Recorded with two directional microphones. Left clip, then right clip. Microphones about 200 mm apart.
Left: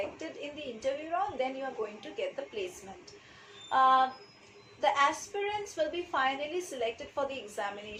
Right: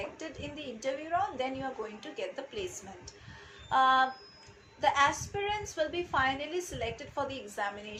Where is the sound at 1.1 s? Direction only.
15° right (ahead or behind).